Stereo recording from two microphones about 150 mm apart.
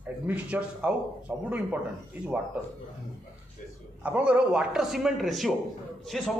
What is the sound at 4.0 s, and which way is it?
A man's voice, 10° right (ahead or behind).